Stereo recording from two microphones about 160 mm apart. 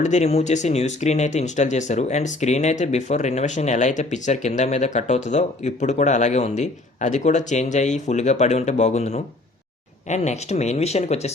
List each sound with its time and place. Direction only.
0.0 s speech: 45° left (ahead or behind)